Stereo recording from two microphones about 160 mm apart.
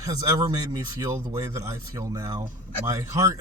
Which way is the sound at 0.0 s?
25° right (ahead or behind).